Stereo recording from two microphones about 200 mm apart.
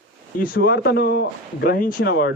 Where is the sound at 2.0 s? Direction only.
60° left (ahead or behind).